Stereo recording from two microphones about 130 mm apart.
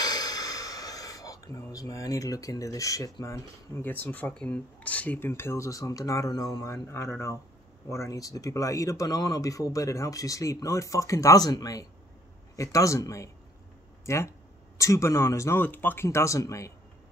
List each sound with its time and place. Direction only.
0.0 s speech: 30° left (ahead or behind)